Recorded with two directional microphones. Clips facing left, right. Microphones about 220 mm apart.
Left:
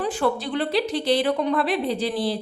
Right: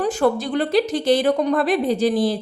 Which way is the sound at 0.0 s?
45° right (ahead or behind).